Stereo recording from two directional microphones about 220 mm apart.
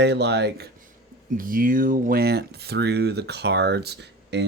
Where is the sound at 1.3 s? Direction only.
40° right (ahead or behind).